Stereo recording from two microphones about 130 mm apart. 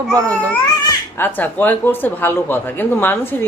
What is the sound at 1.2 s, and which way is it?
A woman's voice, 15° left (ahead or behind).